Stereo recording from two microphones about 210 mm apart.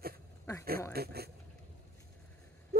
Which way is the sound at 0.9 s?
50° right (ahead or behind).